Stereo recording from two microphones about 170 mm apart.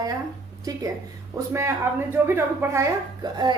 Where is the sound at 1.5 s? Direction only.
15° right (ahead or behind).